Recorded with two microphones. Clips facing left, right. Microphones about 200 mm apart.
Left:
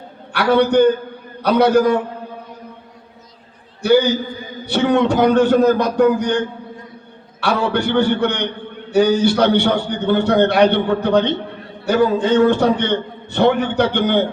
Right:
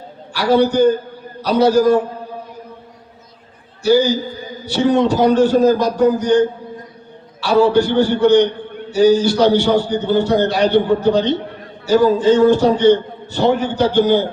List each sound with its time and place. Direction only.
0.3 s a man's voice: 60° left (ahead or behind)
3.8 s a man's voice: 60° left (ahead or behind)
7.4 s a man's voice: 60° left (ahead or behind)